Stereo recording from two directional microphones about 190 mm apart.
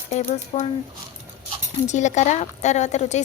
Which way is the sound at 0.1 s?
35° left (ahead or behind).